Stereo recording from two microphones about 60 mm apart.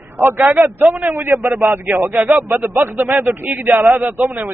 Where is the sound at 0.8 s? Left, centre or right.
Right.